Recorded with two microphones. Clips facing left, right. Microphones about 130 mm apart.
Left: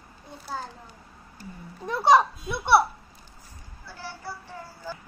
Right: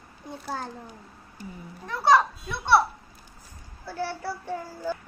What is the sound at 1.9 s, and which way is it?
Speech, 15° left (ahead or behind).